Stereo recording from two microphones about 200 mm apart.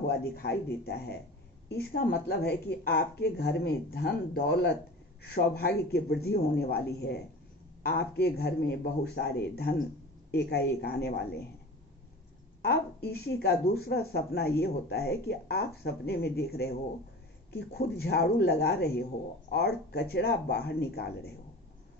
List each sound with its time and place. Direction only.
0.0 s speech: 55° left (ahead or behind)
12.6 s speech: 50° left (ahead or behind)